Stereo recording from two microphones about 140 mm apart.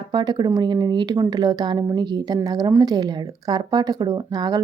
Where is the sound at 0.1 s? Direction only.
30° right (ahead or behind).